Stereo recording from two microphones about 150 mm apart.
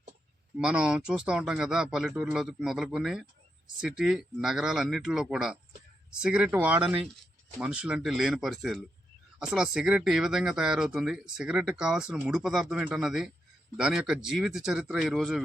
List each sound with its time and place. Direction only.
0.6 s speech: 5° right (ahead or behind)